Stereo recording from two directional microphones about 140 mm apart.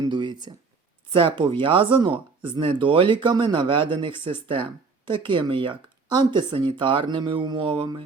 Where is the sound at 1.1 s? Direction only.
40° right (ahead or behind).